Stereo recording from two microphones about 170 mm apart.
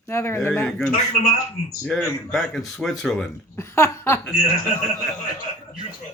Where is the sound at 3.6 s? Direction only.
15° left (ahead or behind).